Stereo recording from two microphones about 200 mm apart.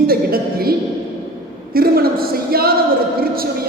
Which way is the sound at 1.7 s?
50° right (ahead or behind).